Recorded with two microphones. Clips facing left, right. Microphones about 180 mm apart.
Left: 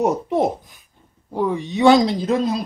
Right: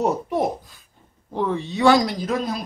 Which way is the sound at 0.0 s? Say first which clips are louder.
Left 3 dB; 20° left (ahead or behind).